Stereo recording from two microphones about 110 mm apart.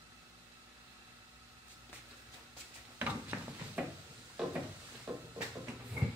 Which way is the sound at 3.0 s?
15° right (ahead or behind).